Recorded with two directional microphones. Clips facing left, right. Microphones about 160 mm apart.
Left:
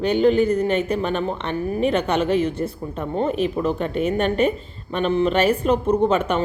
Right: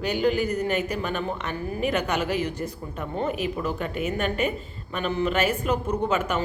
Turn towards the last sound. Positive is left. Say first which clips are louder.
# left 6 dB
turn(degrees=30)  # may be behind; listen again after turning